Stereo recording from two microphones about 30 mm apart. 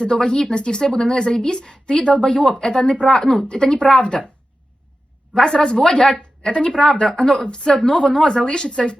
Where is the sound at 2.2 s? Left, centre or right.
Left.